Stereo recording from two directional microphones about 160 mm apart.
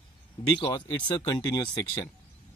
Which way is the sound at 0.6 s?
30° left (ahead or behind).